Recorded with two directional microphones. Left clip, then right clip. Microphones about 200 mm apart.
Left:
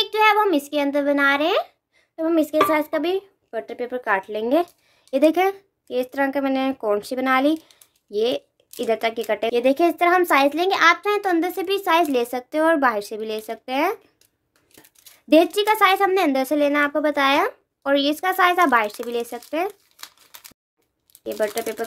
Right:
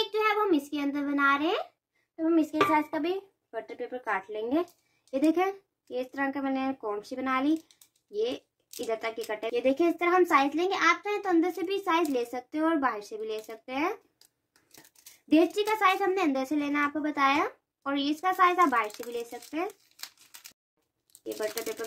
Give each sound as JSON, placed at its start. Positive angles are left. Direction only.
{"t": 0.0, "sound": "a child's voice", "side_deg": 50}
{"t": 15.2, "sound": "a woman's voice", "side_deg": 55}
{"t": 20.0, "sound": "a sound", "side_deg": 5}